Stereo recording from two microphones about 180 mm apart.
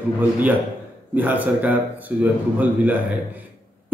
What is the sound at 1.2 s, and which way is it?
Speech, 10° right (ahead or behind).